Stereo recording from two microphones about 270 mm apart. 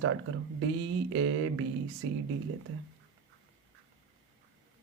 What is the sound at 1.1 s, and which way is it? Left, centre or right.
Speech, right.